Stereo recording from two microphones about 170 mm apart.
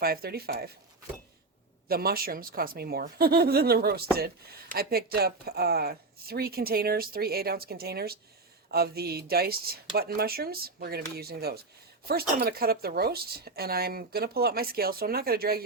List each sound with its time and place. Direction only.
0.0 s speech: 65° right (ahead or behind)
1.9 s speech: 60° right (ahead or behind)